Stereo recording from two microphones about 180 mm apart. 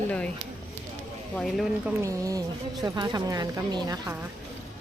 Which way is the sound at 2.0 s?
20° right (ahead or behind).